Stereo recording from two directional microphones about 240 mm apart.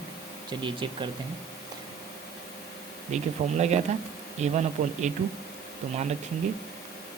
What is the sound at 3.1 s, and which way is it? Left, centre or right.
Speech, right.